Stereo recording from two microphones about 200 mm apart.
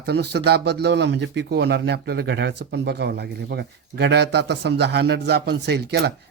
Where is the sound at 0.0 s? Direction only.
55° right (ahead or behind).